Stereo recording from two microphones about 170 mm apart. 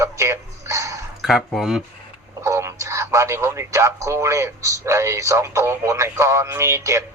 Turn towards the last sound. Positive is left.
turn(degrees=-15)  # may be behind; listen again after turning